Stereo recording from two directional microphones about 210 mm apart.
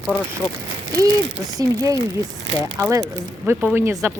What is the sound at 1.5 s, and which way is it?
Speech, 15° right (ahead or behind).